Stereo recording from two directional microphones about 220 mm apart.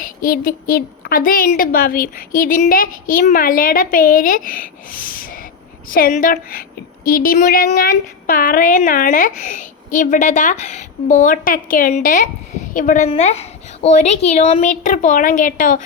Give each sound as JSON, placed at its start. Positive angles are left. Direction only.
{"t": 0.0, "sound": "a woman's voice", "side_deg": 40}